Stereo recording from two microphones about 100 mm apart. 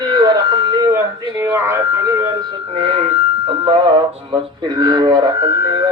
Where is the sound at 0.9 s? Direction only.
30° right (ahead or behind).